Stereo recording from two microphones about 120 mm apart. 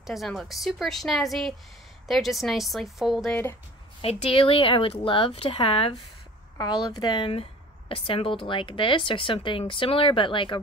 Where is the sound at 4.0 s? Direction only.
50° left (ahead or behind).